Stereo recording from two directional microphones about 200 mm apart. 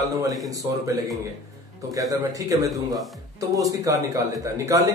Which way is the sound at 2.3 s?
15° right (ahead or behind).